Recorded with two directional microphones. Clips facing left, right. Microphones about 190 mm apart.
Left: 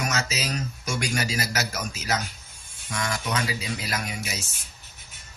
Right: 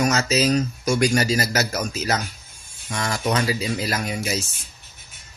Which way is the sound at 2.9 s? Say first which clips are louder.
Right 5 dB; 35° right (ahead or behind).